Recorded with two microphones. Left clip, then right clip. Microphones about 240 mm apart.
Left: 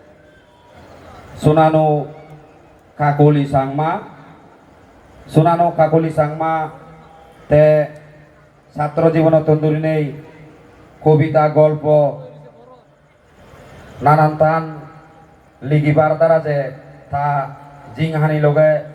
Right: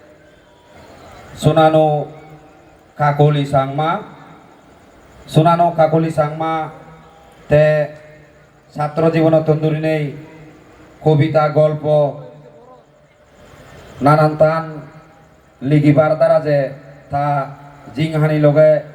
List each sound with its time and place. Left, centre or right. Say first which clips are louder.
1.4 s a man's voice: right 1 dB; right
3.0 s a man's voice: left 1 dB; right
5.2 s a man's voice: right 1 dB; right
11.0 s a man's voice: left 1 dB; right
14.0 s a man's voice: even; right
15.8 s a man's voice: right 1 dB; right
17.1 s mantra: right 1 dB; right
17.9 s a man's voice: right 1 dB; right